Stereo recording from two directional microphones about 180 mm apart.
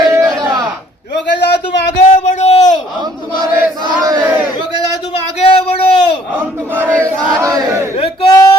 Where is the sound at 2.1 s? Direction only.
40° left (ahead or behind).